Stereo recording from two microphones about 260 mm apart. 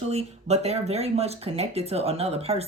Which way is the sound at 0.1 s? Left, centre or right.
Right.